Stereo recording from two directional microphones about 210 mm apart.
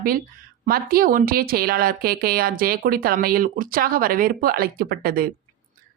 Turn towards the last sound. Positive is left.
turn(degrees=-45)  # may be behind; listen again after turning